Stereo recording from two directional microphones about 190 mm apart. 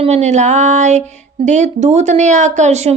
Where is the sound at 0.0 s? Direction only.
35° right (ahead or behind).